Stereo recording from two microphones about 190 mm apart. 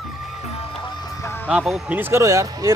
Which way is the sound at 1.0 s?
15° left (ahead or behind).